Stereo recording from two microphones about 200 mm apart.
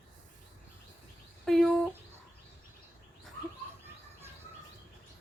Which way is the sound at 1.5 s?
Centre (ahead or behind).